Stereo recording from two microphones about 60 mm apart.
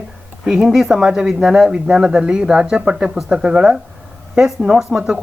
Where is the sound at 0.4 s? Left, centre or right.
Centre.